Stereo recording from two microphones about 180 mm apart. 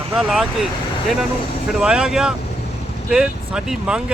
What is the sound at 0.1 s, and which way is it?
Speech, 5° right (ahead or behind).